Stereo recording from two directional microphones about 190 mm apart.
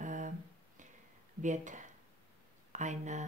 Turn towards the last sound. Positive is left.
turn(degrees=-40)  # may be behind; listen again after turning